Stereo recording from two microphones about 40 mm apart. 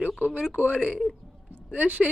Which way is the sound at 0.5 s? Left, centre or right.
Right.